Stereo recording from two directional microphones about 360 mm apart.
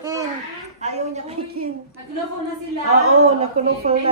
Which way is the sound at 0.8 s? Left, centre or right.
Centre.